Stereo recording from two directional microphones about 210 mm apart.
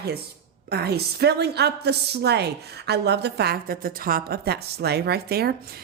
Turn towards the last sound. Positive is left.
turn(degrees=-50)  # may be behind; listen again after turning